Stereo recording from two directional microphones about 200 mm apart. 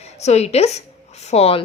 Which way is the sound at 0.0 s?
35° left (ahead or behind).